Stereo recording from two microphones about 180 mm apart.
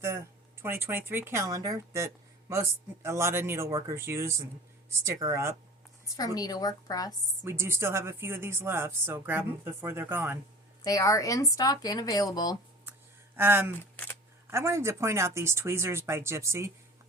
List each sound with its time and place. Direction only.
0.6 s speech: 10° right (ahead or behind)
6.1 s speech: 20° left (ahead or behind)
7.4 s speech: 15° right (ahead or behind)
10.8 s speech: 20° left (ahead or behind)
13.3 s speech: 10° right (ahead or behind)
13.9 s a sound: 10° left (ahead or behind)
14.5 s speech: 15° right (ahead or behind)